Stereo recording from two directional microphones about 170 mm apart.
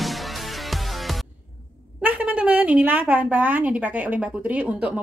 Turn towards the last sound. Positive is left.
turn(degrees=-10)  # may be behind; listen again after turning